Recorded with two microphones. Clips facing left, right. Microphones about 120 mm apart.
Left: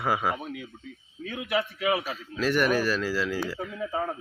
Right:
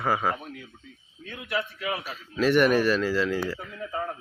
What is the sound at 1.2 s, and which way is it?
Speech, 90° left.